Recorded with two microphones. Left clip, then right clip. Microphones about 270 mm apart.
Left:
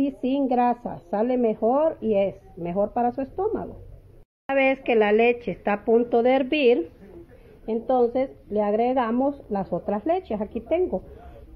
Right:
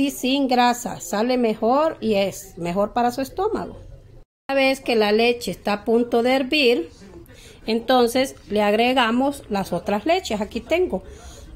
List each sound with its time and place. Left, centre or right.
0.0 s a woman's voice: centre
7.9 s a woman's voice: centre